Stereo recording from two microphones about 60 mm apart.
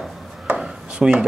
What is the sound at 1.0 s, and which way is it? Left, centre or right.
Speech, centre.